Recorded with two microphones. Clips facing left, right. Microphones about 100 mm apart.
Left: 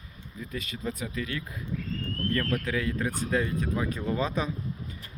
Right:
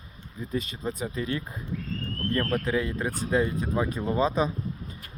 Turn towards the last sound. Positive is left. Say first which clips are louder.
# right 4 dB
turn(degrees=-25)  # may be behind; listen again after turning